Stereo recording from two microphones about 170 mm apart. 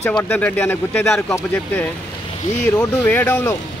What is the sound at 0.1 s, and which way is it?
Speech, 10° left (ahead or behind).